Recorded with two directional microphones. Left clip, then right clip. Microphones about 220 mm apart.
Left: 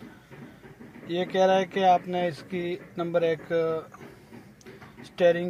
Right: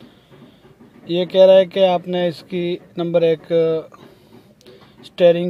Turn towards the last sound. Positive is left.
turn(degrees=-45)  # may be behind; listen again after turning